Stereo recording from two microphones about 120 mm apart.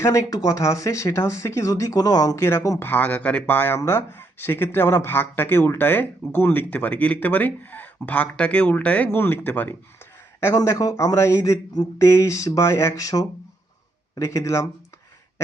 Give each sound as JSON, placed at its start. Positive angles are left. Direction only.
{"t": 0.0, "sound": "speech", "side_deg": 25}